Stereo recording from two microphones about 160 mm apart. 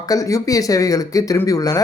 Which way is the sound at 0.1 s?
20° left (ahead or behind).